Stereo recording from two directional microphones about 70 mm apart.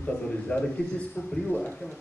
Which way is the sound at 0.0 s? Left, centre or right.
Centre.